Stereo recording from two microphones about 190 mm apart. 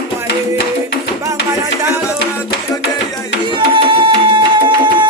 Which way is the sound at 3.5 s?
25° right (ahead or behind).